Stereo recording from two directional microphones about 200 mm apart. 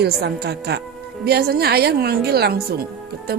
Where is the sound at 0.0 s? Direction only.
55° right (ahead or behind).